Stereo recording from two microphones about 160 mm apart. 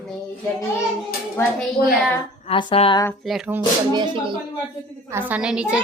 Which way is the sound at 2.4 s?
35° left (ahead or behind).